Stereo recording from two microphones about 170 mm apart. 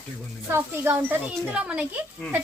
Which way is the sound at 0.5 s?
15° right (ahead or behind).